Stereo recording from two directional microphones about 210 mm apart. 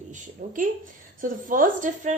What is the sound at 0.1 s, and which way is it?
A woman's voice, 40° right (ahead or behind).